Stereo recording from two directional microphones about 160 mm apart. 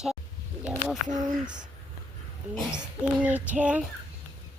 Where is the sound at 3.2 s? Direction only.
10° right (ahead or behind).